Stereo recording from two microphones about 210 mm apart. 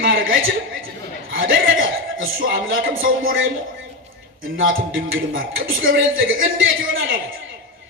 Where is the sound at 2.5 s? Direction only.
65° right (ahead or behind).